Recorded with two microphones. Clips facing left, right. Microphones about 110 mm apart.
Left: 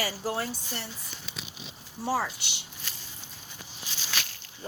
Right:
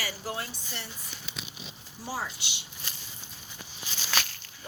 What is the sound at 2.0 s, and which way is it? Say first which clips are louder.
Speech: left 6 dB; 70° left (ahead or behind).